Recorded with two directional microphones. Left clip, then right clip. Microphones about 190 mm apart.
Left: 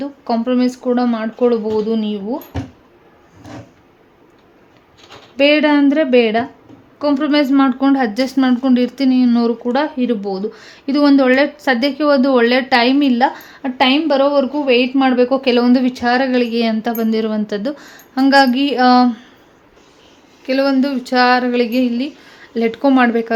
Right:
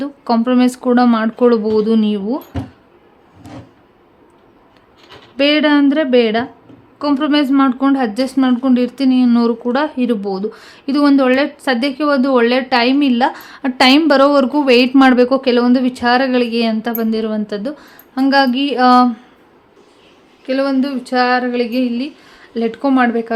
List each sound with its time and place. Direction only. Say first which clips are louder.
0.0 s speech: right 3 dB; 15° right (ahead or behind)
5.4 s speech: even; centre (ahead or behind); by 15.4 s 20° right (ahead or behind)
15.4 s speech: even; 5° right (ahead or behind)
20.5 s speech: left 1 dB; 5° left (ahead or behind)